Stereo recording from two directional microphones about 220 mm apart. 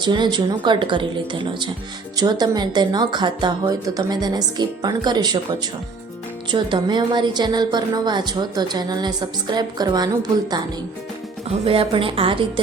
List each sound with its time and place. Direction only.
0.0 s a woman's voice: 20° right (ahead or behind)
6.5 s a woman's voice: 20° right (ahead or behind)
11.6 s a woman's voice: 25° right (ahead or behind)